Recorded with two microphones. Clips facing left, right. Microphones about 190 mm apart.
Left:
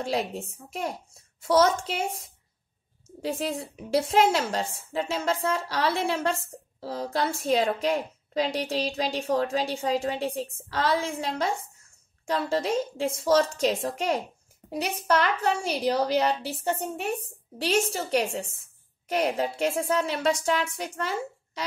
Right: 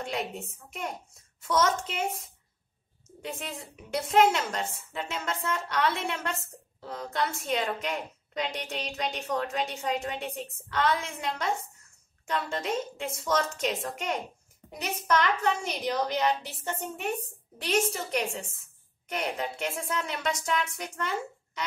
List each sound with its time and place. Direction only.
0.0 s a woman's voice: 35° left (ahead or behind)